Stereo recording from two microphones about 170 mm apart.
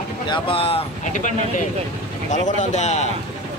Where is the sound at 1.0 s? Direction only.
45° left (ahead or behind).